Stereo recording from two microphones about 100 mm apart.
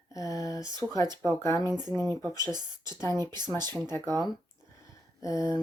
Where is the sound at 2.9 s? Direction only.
35° left (ahead or behind).